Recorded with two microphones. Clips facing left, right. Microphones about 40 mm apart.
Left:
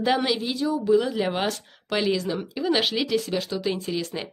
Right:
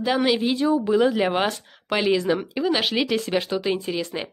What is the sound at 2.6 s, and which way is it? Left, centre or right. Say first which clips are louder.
Speech: left 2 dB; centre.